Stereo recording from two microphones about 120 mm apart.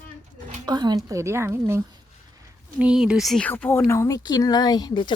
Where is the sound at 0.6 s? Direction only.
35° right (ahead or behind).